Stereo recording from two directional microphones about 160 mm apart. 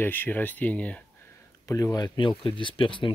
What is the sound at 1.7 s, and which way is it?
Speech, 20° left (ahead or behind).